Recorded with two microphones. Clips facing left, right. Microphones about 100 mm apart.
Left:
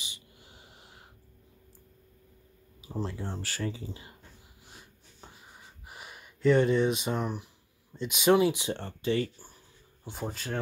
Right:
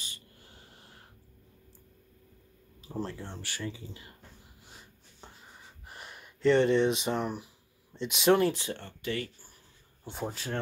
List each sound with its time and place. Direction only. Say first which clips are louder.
0.0 s snort: left 1 dB; 10° left (ahead or behind)
2.8 s speech: left 1 dB; 10° left (ahead or behind)
3.3 s speech: left 4 dB; 35° left (ahead or behind)
4.7 s a sound: left 2 dB; 5° left (ahead or behind)
5.9 s speech: even; 5° left (ahead or behind)
8.6 s speech: left 5 dB; 30° left (ahead or behind)
10.0 s speech: even; centre (ahead or behind)